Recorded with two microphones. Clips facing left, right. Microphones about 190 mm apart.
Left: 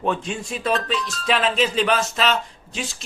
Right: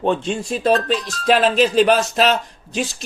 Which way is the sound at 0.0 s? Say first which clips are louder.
Right 5 dB; 30° right (ahead or behind).